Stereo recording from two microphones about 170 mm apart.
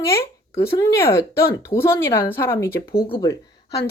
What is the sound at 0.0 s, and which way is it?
Speech, 15° left (ahead or behind).